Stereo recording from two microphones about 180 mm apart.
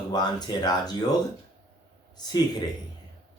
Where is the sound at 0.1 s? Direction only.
25° left (ahead or behind).